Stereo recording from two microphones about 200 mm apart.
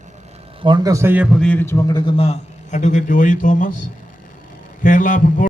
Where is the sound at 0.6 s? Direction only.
20° right (ahead or behind); by 2.0 s 15° left (ahead or behind).